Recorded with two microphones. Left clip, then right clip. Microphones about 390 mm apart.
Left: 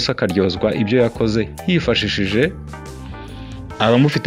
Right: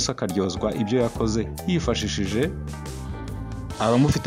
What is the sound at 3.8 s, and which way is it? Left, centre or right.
Speech, right.